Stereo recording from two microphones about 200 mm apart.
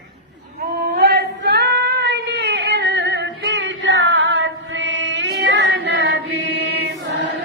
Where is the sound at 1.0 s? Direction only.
55° right (ahead or behind).